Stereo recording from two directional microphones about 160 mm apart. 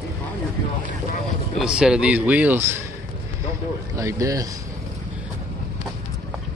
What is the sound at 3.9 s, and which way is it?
Speech, 20° right (ahead or behind).